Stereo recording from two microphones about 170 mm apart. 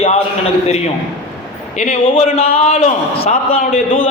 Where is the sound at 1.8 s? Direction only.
40° left (ahead or behind).